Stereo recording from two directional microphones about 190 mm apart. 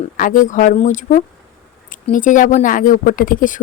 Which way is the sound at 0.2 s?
45° left (ahead or behind).